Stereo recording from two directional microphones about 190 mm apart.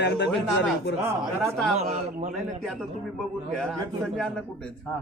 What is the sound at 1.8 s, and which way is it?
Speech, 35° right (ahead or behind).